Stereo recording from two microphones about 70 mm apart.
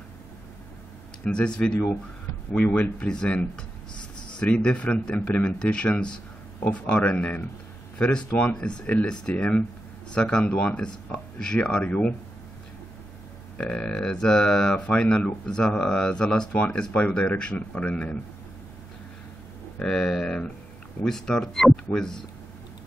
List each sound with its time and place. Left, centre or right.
1.2 s speech: centre
13.6 s speech: centre
19.8 s speech: centre